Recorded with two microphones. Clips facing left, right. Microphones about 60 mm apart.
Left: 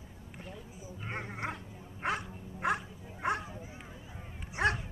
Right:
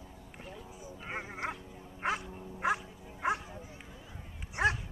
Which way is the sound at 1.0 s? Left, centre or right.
Centre.